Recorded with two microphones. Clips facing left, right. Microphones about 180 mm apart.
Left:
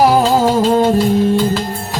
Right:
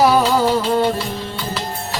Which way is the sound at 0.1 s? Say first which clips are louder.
Left 3 dB; 45° left (ahead or behind).